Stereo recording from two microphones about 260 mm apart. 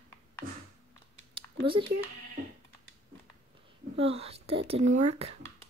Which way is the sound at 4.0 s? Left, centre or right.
Right.